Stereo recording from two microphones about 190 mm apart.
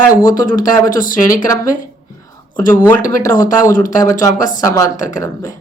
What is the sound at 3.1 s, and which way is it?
Speech, 15° left (ahead or behind).